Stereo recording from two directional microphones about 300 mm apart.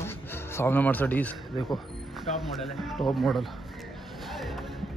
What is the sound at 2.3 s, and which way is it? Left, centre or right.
Speech, left.